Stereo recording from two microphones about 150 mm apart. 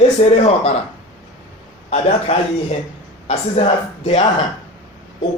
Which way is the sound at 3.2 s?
45° left (ahead or behind).